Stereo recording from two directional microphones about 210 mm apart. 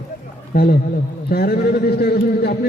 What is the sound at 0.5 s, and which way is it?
A man's voice, 45° left (ahead or behind).